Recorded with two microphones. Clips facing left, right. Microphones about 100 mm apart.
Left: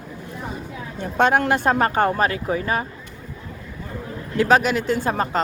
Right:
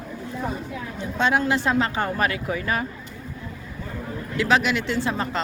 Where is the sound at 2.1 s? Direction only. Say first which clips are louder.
Left 3 dB; 35° left (ahead or behind).